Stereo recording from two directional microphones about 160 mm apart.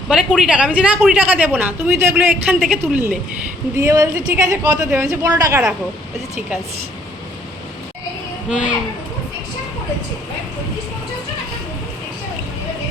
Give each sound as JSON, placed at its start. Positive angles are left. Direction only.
{"t": 0.1, "sound": "a woman's voice", "side_deg": -5}
{"t": 8.4, "sound": "a woman's voice", "side_deg": -5}